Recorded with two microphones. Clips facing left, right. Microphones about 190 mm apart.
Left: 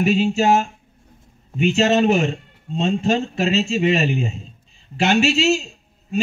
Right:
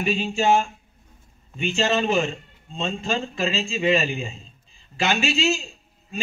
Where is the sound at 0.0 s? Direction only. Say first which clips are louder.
Left 5 dB; 40° left (ahead or behind).